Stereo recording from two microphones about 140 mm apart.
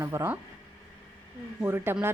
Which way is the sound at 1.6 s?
15° right (ahead or behind).